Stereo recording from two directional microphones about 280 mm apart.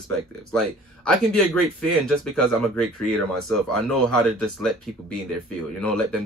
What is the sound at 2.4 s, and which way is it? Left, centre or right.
Speech, centre.